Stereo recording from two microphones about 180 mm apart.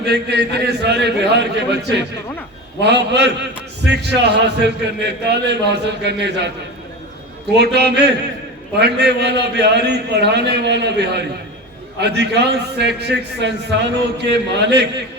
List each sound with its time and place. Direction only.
0.0 s a man's voice: 65° right (ahead or behind)
7.5 s a man's voice: 70° right (ahead or behind)